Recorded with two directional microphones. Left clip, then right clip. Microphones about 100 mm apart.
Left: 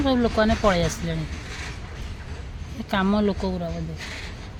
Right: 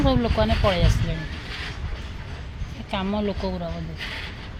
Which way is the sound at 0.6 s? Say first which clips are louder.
Left 1 dB; 90° left.